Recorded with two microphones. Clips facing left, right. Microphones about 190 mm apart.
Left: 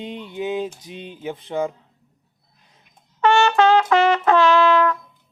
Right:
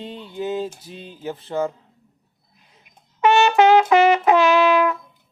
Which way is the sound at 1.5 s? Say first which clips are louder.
Even; 5° left (ahead or behind).